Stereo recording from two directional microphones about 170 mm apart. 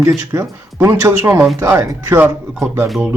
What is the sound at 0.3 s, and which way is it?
Speech, 20° right (ahead or behind).